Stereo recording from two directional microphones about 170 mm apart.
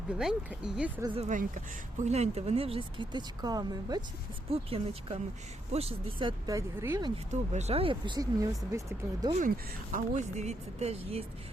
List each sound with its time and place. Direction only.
0.2 s speech: 5° right (ahead or behind)
1.3 s speech: 50° right (ahead or behind); by 4.0 s 25° right (ahead or behind)
4.5 s a woman's voice: 35° right (ahead or behind); by 7.1 s 15° right (ahead or behind)
7.3 s speech: 40° right (ahead or behind); by 9.3 s 20° right (ahead or behind)
9.9 s a woman's voice: 45° right (ahead or behind)